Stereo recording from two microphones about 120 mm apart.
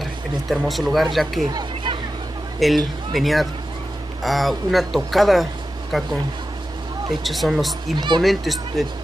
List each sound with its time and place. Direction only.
0.0 s speech: centre (ahead or behind)
1.5 s a sound: 35° right (ahead or behind)
2.6 s speech: centre (ahead or behind)
7.2 s speech: centre (ahead or behind)